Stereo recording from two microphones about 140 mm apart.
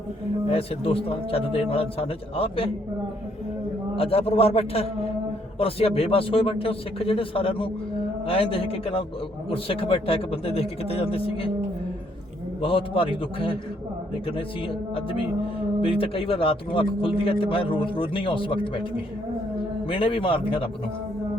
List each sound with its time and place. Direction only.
0.5 s a man's voice: 45° left (ahead or behind)
3.9 s a man's voice: 45° left (ahead or behind)
12.6 s speech: 40° left (ahead or behind)
19.9 s speech: 40° left (ahead or behind)